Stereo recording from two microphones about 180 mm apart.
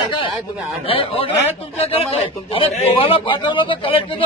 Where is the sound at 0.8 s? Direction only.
30° left (ahead or behind).